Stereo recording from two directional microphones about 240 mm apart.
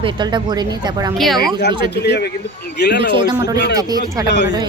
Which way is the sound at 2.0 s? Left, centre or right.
Left.